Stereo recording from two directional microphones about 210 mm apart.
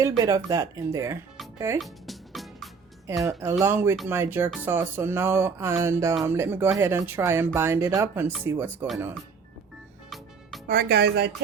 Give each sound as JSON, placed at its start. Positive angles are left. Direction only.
{"t": 0.2, "sound": "speech", "side_deg": -15}
{"t": 1.8, "sound": "music", "side_deg": 0}
{"t": 3.2, "sound": "speech", "side_deg": -5}
{"t": 10.7, "sound": "speech", "side_deg": -50}